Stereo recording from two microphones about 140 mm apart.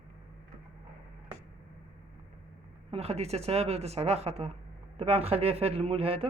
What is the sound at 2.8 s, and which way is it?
Speech, 45° right (ahead or behind).